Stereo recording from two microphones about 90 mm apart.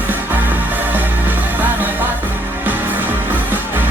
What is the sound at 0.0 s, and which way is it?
Music, 20° right (ahead or behind).